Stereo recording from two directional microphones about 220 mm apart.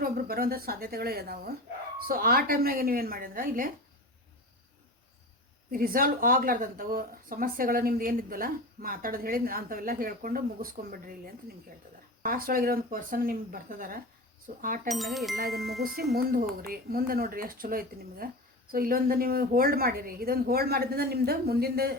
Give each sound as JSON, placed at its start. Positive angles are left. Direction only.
{"t": 0.0, "sound": "a woman's voice", "side_deg": -45}
{"t": 5.7, "sound": "a woman's voice", "side_deg": -40}
{"t": 14.8, "sound": "speech", "side_deg": 0}
{"t": 16.1, "sound": "a woman's voice", "side_deg": -40}